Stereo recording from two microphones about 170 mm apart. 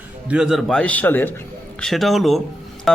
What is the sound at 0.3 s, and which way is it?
A man's voice, 5° right (ahead or behind).